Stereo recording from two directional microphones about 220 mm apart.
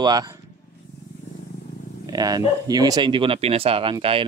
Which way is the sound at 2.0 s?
15° right (ahead or behind).